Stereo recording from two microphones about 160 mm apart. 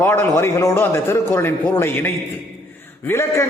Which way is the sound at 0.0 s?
15° left (ahead or behind).